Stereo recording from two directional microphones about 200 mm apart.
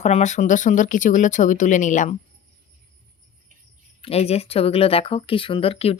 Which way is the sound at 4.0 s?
30° left (ahead or behind).